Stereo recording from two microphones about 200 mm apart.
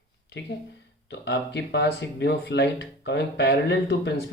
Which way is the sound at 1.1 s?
60° left (ahead or behind).